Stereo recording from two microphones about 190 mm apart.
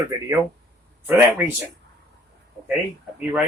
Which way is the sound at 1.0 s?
10° right (ahead or behind).